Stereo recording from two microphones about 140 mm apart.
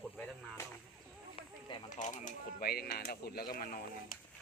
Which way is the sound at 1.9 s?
60° left (ahead or behind).